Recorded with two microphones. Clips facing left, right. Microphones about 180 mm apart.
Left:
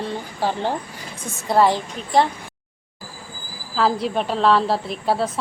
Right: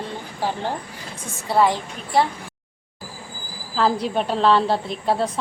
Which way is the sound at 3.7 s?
Centre (ahead or behind).